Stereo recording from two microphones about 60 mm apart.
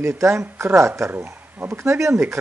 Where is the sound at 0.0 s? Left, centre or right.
Right.